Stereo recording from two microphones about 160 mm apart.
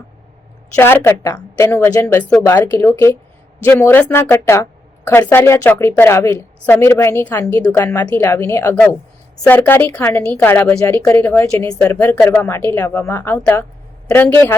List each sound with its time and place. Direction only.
0.8 s a woman's voice: 15° left (ahead or behind)